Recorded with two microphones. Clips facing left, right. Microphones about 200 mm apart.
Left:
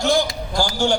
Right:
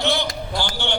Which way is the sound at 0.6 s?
40° left (ahead or behind).